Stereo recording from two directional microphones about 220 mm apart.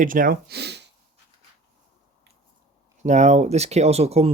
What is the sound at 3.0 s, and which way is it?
Speech, 30° right (ahead or behind).